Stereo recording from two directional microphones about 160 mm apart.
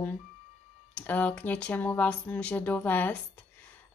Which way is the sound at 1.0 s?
10° left (ahead or behind).